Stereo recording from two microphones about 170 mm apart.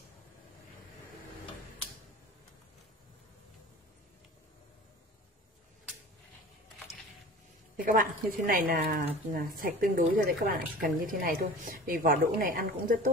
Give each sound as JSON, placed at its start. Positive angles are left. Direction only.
{"t": 7.7, "sound": "a woman's voice", "side_deg": -55}